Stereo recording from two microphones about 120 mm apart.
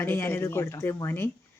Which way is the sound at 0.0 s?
20° left (ahead or behind).